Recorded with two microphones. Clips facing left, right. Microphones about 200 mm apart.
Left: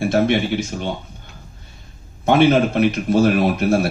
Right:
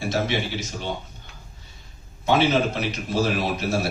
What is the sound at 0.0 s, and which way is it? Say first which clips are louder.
Speech: left 8 dB; 55° left (ahead or behind).